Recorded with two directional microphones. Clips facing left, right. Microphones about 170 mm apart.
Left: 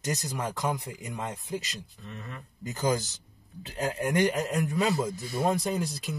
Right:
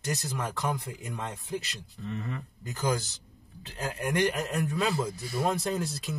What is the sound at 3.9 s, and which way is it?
Speech, 20° left (ahead or behind).